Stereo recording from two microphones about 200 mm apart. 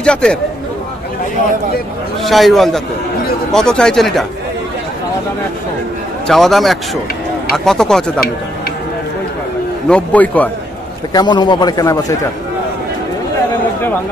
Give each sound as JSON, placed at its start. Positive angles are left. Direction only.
{"t": 0.0, "sound": "speech", "side_deg": 5}
{"t": 2.2, "sound": "speech", "side_deg": 0}
{"t": 6.2, "sound": "speech", "side_deg": 0}
{"t": 9.8, "sound": "a man's voice", "side_deg": 5}
{"t": 11.1, "sound": "a man's voice", "side_deg": 20}